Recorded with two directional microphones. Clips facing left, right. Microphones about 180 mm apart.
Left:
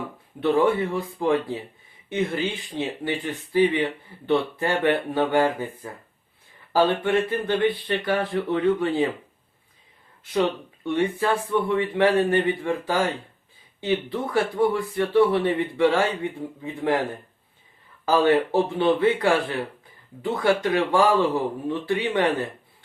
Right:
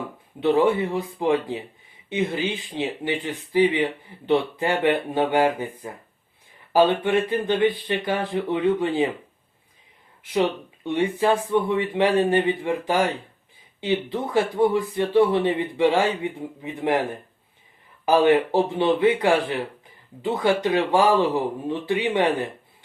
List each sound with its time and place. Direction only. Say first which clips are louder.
0.3 s speech: right 1 dB; 20° right (ahead or behind)
10.8 s speech: right 2 dB; 20° right (ahead or behind)